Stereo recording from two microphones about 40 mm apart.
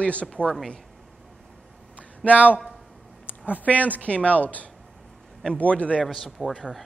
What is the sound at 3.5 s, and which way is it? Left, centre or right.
Speech, left.